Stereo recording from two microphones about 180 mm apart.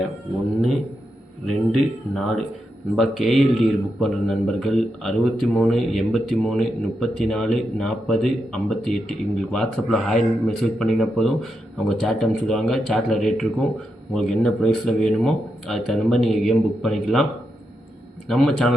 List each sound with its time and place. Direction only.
1.5 s speech: centre (ahead or behind)
18.3 s speech: centre (ahead or behind)